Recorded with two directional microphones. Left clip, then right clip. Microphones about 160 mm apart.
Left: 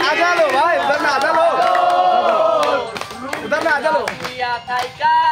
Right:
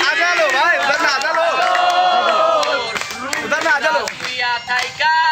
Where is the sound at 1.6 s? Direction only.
5° right (ahead or behind).